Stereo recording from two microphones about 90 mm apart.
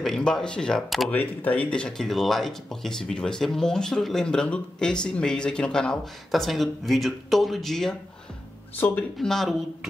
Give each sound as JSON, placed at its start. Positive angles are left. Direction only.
{"t": 0.0, "sound": "speech", "side_deg": 5}
{"t": 1.1, "sound": "speech", "side_deg": 15}
{"t": 8.7, "sound": "speech", "side_deg": 25}
{"t": 9.2, "sound": "speech", "side_deg": 5}